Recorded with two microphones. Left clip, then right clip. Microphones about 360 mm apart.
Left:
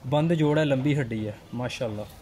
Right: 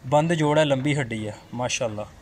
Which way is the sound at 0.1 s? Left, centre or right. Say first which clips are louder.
Right 4 dB; right.